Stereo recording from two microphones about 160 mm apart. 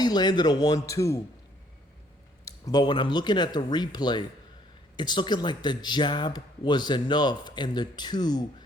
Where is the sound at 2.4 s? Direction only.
25° left (ahead or behind).